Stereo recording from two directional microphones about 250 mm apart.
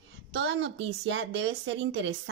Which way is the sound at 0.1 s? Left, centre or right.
Right.